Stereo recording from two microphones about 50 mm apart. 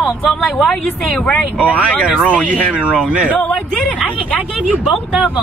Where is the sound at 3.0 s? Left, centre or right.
Right.